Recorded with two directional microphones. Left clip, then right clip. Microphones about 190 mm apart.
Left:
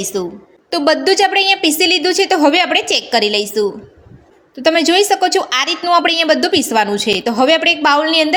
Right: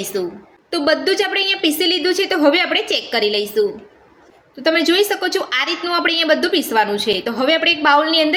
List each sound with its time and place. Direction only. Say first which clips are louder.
0.0 s a woman's voice: left 2 dB; 40° left (ahead or behind)
0.7 s a woman's voice: left 4 dB; 50° left (ahead or behind)